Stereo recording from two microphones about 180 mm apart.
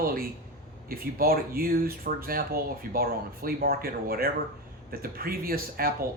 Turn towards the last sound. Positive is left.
turn(degrees=-55)  # may be behind; listen again after turning